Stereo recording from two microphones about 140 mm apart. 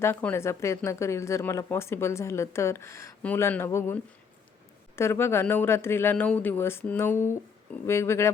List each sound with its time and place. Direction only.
0.0 s speech: 15° left (ahead or behind)